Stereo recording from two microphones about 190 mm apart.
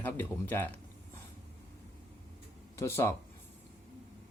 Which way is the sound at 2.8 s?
15° left (ahead or behind).